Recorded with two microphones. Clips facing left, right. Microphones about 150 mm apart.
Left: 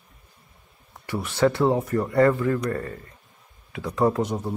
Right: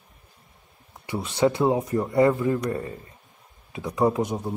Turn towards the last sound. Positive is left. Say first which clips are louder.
# even
turn(degrees=-15)  # may be behind; listen again after turning